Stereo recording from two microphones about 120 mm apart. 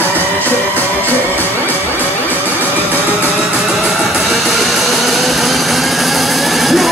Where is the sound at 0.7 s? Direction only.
15° left (ahead or behind).